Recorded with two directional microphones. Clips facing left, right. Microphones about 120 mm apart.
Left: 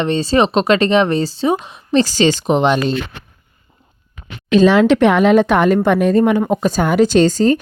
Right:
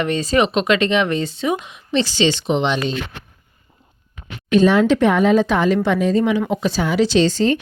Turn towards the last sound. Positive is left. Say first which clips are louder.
# left 4 dB
turn(degrees=40)  # may be behind; listen again after turning